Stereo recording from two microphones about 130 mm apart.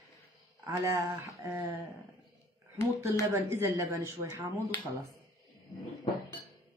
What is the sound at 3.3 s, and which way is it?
Speech, 20° right (ahead or behind).